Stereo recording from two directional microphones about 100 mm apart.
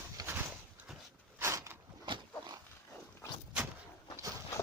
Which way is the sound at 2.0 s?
50° right (ahead or behind).